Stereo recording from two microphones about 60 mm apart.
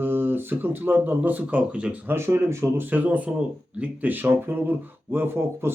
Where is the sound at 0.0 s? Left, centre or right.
Right.